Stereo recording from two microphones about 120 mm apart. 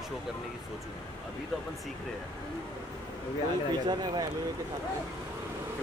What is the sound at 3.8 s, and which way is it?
Speech, 35° right (ahead or behind).